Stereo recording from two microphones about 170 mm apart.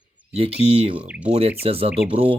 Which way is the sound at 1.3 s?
35° right (ahead or behind).